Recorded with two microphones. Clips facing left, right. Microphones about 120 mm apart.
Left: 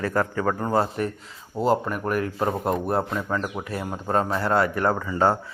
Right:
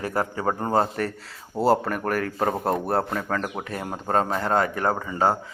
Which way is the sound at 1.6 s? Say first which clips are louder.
Right 2 dB; 40° right (ahead or behind).